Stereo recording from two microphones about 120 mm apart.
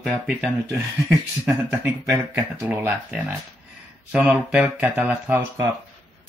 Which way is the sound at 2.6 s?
15° right (ahead or behind).